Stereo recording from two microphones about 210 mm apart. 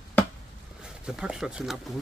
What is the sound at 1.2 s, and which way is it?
Speech, 5° right (ahead or behind).